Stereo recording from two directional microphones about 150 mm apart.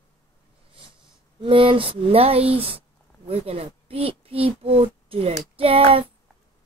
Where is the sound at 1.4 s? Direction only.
35° right (ahead or behind).